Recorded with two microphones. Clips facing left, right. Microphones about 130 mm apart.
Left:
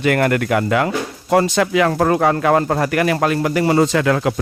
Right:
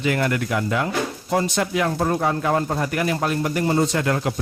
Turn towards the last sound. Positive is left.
turn(degrees=90)